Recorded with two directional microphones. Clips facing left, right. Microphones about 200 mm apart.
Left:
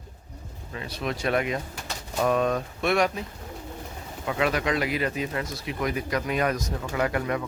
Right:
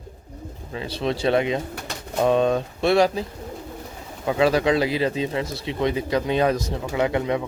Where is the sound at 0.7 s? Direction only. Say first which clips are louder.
Right 5 dB; 30° right (ahead or behind).